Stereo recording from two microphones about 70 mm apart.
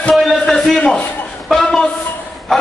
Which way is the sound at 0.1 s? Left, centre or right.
Centre.